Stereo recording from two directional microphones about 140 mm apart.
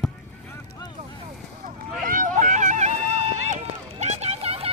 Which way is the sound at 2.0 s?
75° right (ahead or behind).